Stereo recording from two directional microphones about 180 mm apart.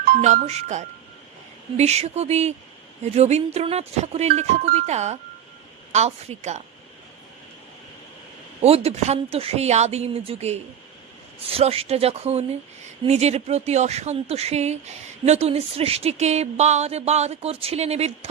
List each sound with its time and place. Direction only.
0.0 s speech: 40° right (ahead or behind)
8.6 s speech: 35° right (ahead or behind)